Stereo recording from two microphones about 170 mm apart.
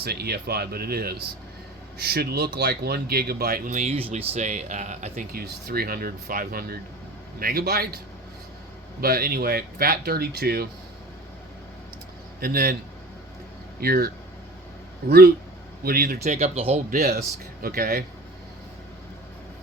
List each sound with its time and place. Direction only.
0.0 s speech: 70° right (ahead or behind)
3.8 s speech: 35° right (ahead or behind); by 10.7 s 65° right (ahead or behind)
12.4 s speech: 60° right (ahead or behind)
13.7 s speech: 65° right (ahead or behind)
16.2 s speech: 40° right (ahead or behind)
16.9 s speech: 65° right (ahead or behind)